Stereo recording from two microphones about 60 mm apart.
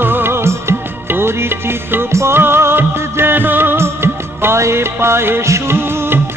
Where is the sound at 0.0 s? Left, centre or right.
Right.